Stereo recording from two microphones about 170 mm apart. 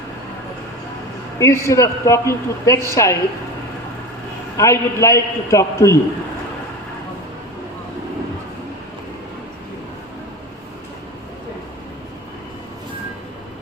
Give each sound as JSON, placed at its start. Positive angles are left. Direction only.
{"t": 1.4, "sound": "a man's voice", "side_deg": 15}
{"t": 4.5, "sound": "a man's voice", "side_deg": 15}